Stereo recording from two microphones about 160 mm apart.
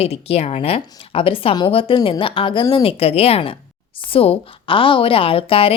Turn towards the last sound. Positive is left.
turn(degrees=35)  # may be behind; listen again after turning